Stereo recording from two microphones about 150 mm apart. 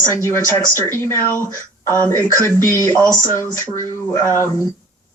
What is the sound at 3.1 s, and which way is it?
Speech, 20° left (ahead or behind).